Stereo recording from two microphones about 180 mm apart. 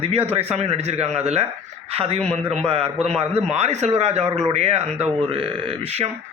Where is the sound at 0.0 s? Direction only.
30° right (ahead or behind).